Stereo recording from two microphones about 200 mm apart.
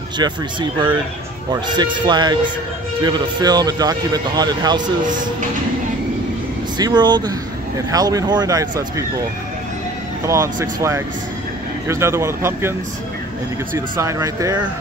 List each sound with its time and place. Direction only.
0.2 s speech: 25° right (ahead or behind)
6.8 s speech: 20° right (ahead or behind)
10.2 s speech: 15° right (ahead or behind)
13.7 s speech: 15° right (ahead or behind)